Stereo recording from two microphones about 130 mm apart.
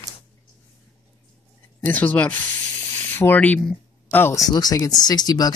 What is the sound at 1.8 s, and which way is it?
Speech, 15° left (ahead or behind).